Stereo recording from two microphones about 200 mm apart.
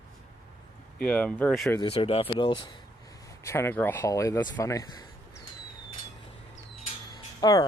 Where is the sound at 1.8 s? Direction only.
30° left (ahead or behind).